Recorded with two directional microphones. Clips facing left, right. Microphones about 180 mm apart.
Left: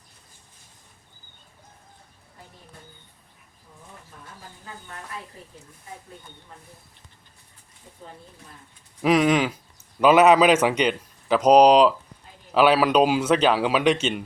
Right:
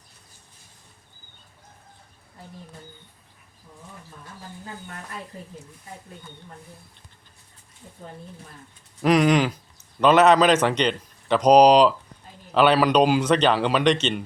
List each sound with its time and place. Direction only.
9.0 s a man's voice: centre (ahead or behind)